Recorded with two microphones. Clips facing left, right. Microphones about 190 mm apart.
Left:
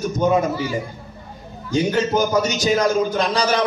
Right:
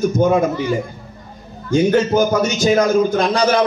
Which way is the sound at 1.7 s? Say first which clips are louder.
Right 5 dB; 50° right (ahead or behind).